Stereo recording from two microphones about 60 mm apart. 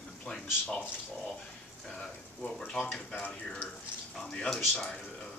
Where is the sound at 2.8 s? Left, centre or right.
Left.